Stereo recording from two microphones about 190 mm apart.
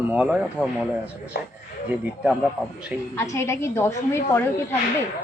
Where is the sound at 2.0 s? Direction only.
5° right (ahead or behind).